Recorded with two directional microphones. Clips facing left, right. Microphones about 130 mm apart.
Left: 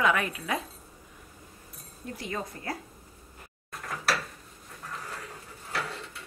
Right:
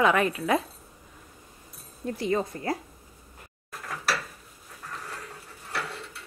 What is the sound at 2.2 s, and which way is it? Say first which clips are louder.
Speech: right 9 dB; 30° right (ahead or behind).